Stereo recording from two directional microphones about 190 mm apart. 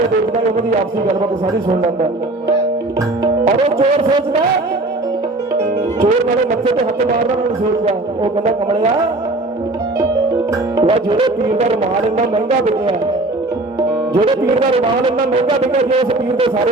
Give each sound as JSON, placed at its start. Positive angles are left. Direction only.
{"t": 7.9, "sound": "music", "side_deg": -30}
{"t": 10.8, "sound": "music", "side_deg": -25}
{"t": 14.7, "sound": "a man's voice", "side_deg": -30}